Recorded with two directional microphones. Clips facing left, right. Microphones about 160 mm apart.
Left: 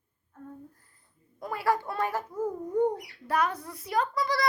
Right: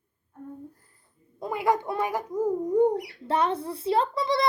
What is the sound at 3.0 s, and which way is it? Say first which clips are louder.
Speech: right 3 dB; 25° right (ahead or behind).